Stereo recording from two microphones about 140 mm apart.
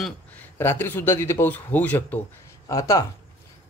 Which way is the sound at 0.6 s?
15° left (ahead or behind).